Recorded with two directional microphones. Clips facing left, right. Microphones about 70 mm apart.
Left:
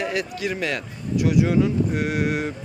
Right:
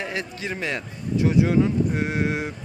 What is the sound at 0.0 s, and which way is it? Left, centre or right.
Speech, right.